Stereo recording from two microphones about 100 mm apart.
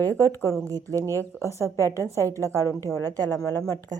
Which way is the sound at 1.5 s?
30° left (ahead or behind).